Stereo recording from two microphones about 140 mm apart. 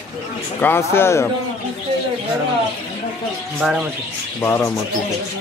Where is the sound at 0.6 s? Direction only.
15° left (ahead or behind).